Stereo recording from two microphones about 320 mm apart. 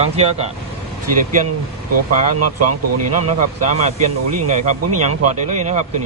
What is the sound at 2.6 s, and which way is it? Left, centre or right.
Speech, right.